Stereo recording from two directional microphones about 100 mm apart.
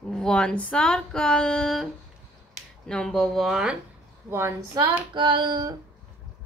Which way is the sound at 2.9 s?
5° left (ahead or behind).